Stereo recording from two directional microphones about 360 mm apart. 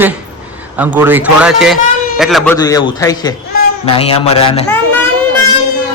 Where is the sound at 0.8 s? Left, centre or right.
Centre.